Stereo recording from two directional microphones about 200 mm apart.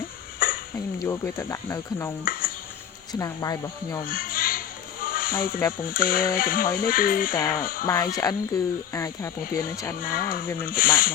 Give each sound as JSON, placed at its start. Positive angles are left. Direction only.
{"t": 0.3, "sound": "a sound", "side_deg": 45}
{"t": 1.0, "sound": "speech", "side_deg": 10}
{"t": 2.2, "sound": "dishes", "side_deg": 45}
{"t": 3.1, "sound": "speech", "side_deg": 15}
{"t": 4.1, "sound": "a sound", "side_deg": 45}
{"t": 5.0, "sound": "snake", "side_deg": 45}
{"t": 5.8, "sound": "speech", "side_deg": 45}
{"t": 7.9, "sound": "speech", "side_deg": 15}
{"t": 10.0, "sound": "speech", "side_deg": 45}